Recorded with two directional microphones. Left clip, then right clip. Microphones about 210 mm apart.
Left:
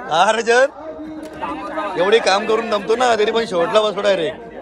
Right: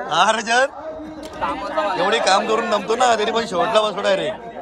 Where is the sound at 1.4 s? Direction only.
50° right (ahead or behind).